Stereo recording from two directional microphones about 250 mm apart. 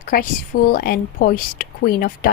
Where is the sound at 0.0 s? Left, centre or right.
Left.